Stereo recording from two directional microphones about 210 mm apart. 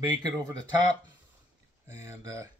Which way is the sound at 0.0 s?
20° right (ahead or behind).